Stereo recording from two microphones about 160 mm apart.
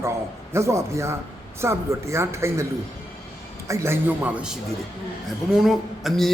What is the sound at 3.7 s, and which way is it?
Speech, 15° right (ahead or behind).